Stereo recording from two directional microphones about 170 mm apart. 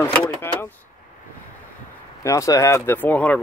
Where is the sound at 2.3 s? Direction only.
20° left (ahead or behind).